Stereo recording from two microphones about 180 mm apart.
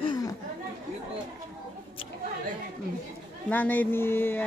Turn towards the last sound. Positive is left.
turn(degrees=10)  # may be behind; listen again after turning